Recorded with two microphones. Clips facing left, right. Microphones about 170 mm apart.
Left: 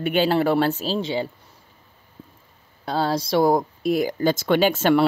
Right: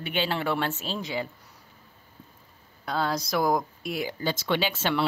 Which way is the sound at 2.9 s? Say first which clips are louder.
Left 5 dB; 30° left (ahead or behind).